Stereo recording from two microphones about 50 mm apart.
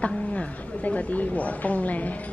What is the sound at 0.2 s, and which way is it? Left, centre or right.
A woman's voice, left.